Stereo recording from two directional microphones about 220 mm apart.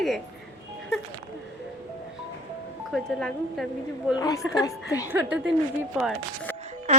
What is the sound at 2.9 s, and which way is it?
Speech, centre (ahead or behind).